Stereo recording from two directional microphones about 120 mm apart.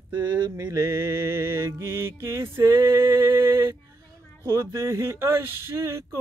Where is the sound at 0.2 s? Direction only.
25° right (ahead or behind).